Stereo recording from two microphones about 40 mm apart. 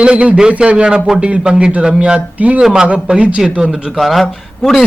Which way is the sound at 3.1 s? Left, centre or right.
Right.